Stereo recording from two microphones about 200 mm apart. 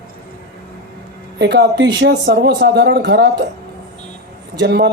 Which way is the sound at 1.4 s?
60° right (ahead or behind).